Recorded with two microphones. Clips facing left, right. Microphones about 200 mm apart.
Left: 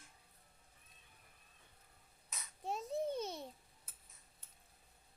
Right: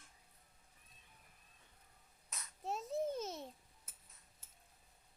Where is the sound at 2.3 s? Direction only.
Centre (ahead or behind).